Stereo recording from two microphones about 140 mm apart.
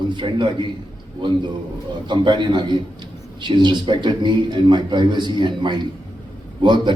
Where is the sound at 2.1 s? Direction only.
35° right (ahead or behind).